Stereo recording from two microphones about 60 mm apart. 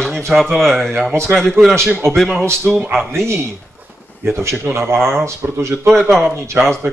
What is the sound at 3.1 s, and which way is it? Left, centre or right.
A man's voice, right.